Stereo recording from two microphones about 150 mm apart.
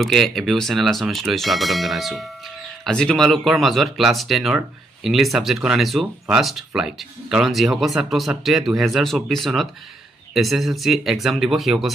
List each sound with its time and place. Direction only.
0.0 s speech: centre (ahead or behind)